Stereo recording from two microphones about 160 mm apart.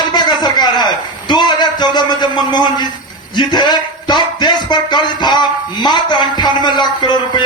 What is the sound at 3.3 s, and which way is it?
Speech, 25° left (ahead or behind).